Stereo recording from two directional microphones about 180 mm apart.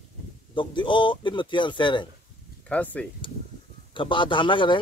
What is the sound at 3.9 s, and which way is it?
Speech, 30° left (ahead or behind).